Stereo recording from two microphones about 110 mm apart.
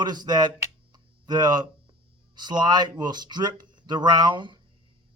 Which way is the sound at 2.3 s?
40° right (ahead or behind).